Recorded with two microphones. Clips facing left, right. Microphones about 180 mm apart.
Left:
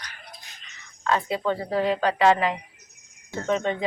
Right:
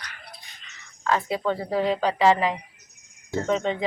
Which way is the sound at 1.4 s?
10° right (ahead or behind).